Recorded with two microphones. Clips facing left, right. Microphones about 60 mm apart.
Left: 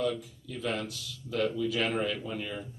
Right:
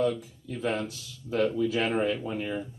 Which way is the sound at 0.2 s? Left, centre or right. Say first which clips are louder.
Right 4 dB; right.